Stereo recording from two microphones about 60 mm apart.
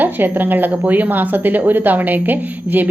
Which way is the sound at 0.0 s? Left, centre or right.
Right.